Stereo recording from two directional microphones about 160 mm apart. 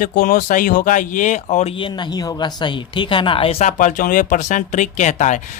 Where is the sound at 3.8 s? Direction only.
55° left (ahead or behind).